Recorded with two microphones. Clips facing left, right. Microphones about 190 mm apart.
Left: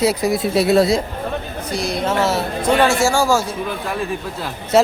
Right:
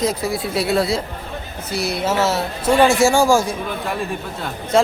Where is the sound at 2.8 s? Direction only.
15° right (ahead or behind).